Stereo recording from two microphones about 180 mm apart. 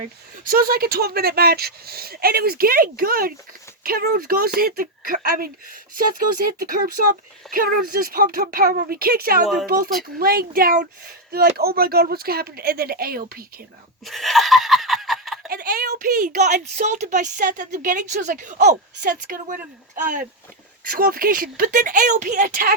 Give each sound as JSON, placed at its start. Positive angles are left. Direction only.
{"t": 0.4, "sound": "speech", "side_deg": -55}
{"t": 14.0, "sound": "snicker", "side_deg": 0}
{"t": 15.4, "sound": "speech", "side_deg": -55}
{"t": 20.8, "sound": "speech", "side_deg": -50}